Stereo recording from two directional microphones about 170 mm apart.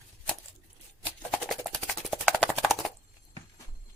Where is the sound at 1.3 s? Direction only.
Centre (ahead or behind).